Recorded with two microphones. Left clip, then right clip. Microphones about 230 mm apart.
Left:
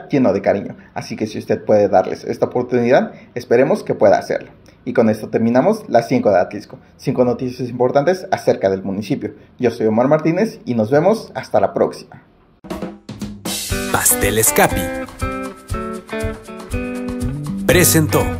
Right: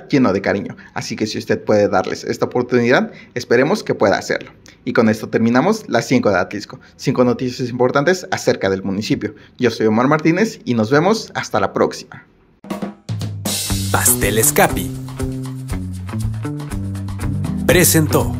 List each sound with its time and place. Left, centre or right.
0.1 s speech: right
13.9 s speech: centre
15.7 s music: centre